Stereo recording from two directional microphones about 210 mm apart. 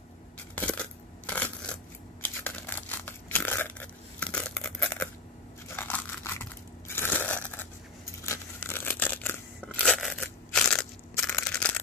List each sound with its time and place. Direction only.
0.6 s coin: 5° left (ahead or behind)
2.2 s crumpling: 10° left (ahead or behind)
5.8 s a sound: 10° left (ahead or behind)
6.9 s crushing: 10° left (ahead or behind)
8.3 s a sound: 10° left (ahead or behind)
9.8 s crunch: centre (ahead or behind)